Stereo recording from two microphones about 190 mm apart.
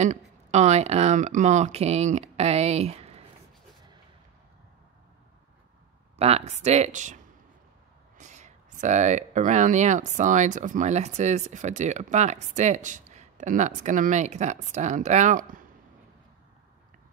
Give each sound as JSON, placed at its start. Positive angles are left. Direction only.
{"t": 0.0, "sound": "speech", "side_deg": -35}
{"t": 6.1, "sound": "speech", "side_deg": -35}
{"t": 8.2, "sound": "speech", "side_deg": -40}